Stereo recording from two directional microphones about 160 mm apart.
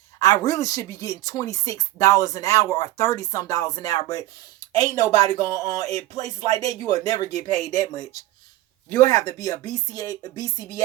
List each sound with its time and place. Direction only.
0.2 s speech: 20° left (ahead or behind)
7.3 s speech: 45° right (ahead or behind)
7.6 s speech: 20° left (ahead or behind)